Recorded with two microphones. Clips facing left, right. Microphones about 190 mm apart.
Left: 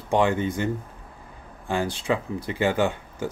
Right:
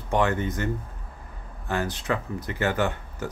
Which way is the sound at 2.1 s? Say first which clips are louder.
Left 4 dB; 15° left (ahead or behind).